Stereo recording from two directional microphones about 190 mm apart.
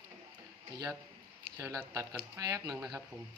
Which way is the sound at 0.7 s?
20° right (ahead or behind).